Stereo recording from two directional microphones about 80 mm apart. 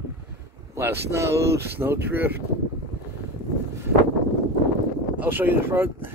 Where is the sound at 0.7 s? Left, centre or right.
Right.